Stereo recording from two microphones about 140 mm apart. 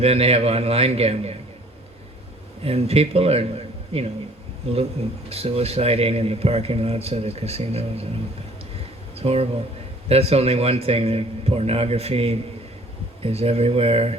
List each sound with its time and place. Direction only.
0.0 s a man's voice: 45° right (ahead or behind)
2.6 s a man's voice: 45° right (ahead or behind)
9.1 s a man's voice: 45° right (ahead or behind)